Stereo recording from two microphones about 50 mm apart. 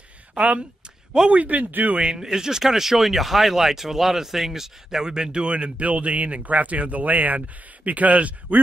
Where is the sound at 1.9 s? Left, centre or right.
Centre.